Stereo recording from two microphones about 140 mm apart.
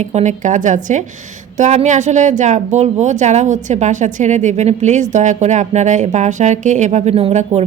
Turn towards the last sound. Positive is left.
turn(degrees=-50)  # may be behind; listen again after turning